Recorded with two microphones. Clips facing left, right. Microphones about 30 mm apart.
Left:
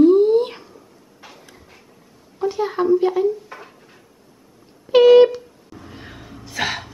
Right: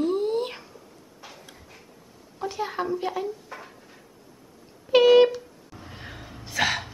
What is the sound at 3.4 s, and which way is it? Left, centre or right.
Cupboard open or close, centre.